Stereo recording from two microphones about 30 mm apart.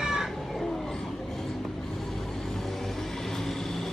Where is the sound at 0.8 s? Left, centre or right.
Centre.